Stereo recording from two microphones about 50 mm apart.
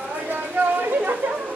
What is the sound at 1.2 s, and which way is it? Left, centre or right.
Chatter, right.